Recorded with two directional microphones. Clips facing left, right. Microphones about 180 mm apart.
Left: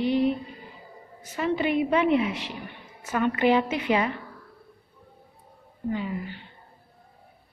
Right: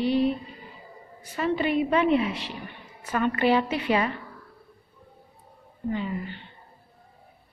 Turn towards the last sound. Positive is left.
turn(degrees=10)  # may be behind; listen again after turning